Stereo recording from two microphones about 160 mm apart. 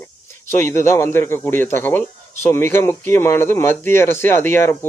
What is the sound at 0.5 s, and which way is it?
Speech, 15° left (ahead or behind).